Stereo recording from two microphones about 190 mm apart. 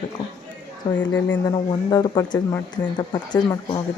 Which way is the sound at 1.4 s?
20° left (ahead or behind).